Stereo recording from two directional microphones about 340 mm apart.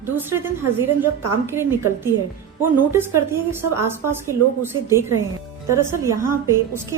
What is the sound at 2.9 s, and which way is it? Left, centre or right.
A woman's voice, centre.